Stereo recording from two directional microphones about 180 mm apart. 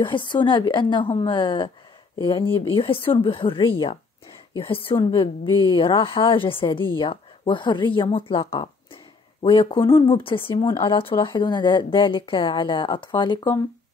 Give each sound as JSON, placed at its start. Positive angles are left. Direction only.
{"t": 0.0, "sound": "speech", "side_deg": 25}